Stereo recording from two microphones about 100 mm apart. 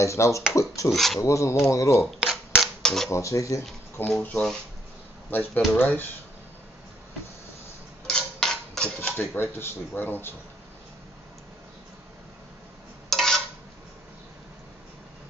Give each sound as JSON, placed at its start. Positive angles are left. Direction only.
{"t": 0.0, "sound": "speech", "side_deg": 30}
{"t": 0.9, "sound": "speech", "side_deg": 0}
{"t": 1.2, "sound": "speech", "side_deg": 30}
{"t": 2.1, "sound": "a sound", "side_deg": 0}
{"t": 3.1, "sound": "speech", "side_deg": 30}
{"t": 4.2, "sound": "speech", "side_deg": 10}
{"t": 8.1, "sound": "a sound", "side_deg": 5}
{"t": 9.1, "sound": "speech", "side_deg": 20}
{"t": 13.1, "sound": "a sound", "side_deg": 5}